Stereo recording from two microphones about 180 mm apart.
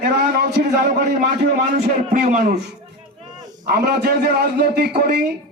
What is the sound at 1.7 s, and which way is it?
Speech, 60° right (ahead or behind).